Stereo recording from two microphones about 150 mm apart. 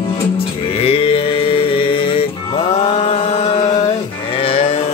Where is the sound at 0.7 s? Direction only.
40° left (ahead or behind).